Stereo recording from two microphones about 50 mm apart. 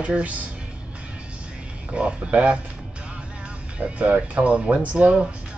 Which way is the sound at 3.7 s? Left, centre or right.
Right.